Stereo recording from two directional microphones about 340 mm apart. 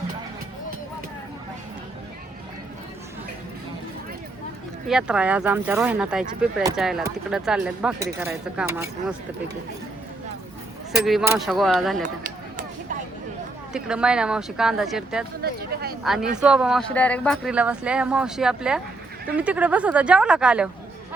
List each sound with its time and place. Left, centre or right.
4.9 s speech: centre
10.9 s speech: centre
12.0 s a sound: right
13.7 s speech: centre
15.4 s speech: right
16.0 s speech: centre